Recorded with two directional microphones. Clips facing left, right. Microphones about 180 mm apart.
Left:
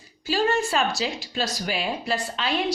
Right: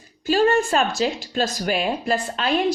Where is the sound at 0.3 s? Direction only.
50° right (ahead or behind).